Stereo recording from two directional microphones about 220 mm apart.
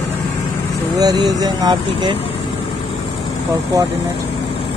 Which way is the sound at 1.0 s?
15° right (ahead or behind).